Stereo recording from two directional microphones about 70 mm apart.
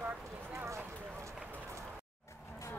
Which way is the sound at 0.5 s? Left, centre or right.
Right.